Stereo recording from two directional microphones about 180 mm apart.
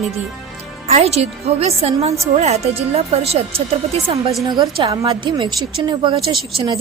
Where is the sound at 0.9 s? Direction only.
35° right (ahead or behind).